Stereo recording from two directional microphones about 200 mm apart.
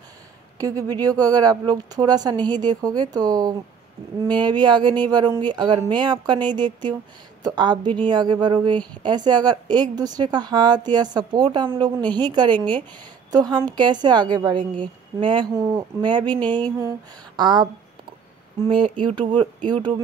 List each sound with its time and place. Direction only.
0.6 s a woman's voice: 15° right (ahead or behind)
17.4 s a woman's voice: 20° right (ahead or behind)
18.7 s a woman's voice: 25° right (ahead or behind)